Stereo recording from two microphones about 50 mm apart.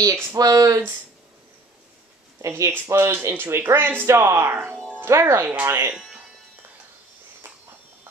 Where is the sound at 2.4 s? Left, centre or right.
Right.